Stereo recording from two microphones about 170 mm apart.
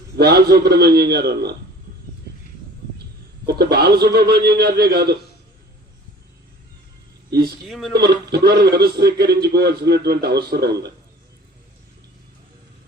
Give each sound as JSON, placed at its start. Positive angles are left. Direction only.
{"t": 0.2, "sound": "a man's voice", "side_deg": -70}
{"t": 3.4, "sound": "a man's voice", "side_deg": -70}
{"t": 7.3, "sound": "a sound", "side_deg": -65}
{"t": 7.7, "sound": "speech", "side_deg": 0}
{"t": 7.9, "sound": "a man's voice", "side_deg": -70}